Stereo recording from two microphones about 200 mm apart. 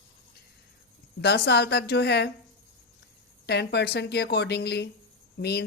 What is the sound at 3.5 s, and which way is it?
Speech, 55° left (ahead or behind).